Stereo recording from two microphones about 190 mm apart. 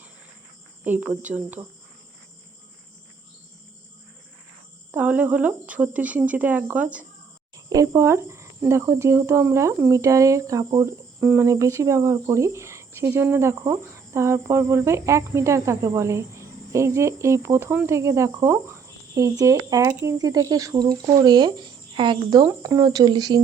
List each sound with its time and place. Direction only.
0.9 s speech: 10° right (ahead or behind)
4.9 s speech: 10° right (ahead or behind)